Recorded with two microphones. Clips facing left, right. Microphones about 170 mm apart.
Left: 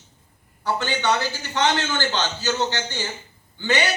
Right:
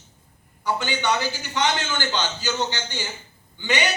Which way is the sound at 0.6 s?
15° right (ahead or behind).